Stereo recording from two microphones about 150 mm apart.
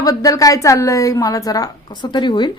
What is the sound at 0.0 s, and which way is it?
A woman's voice, 25° left (ahead or behind).